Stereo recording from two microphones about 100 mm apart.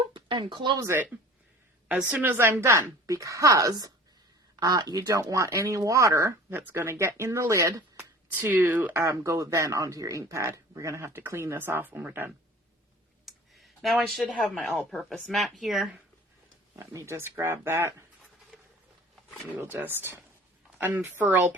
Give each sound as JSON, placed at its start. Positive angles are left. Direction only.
{"t": 0.0, "sound": "a sound", "side_deg": -55}
{"t": 0.8, "sound": "speech", "side_deg": -25}
{"t": 2.0, "sound": "speech", "side_deg": -15}
{"t": 8.3, "sound": "speech", "side_deg": -20}
{"t": 13.2, "sound": "a sound", "side_deg": 0}
{"t": 14.6, "sound": "speech", "side_deg": 0}
{"t": 16.7, "sound": "speech", "side_deg": -30}
{"t": 19.5, "sound": "speech", "side_deg": -20}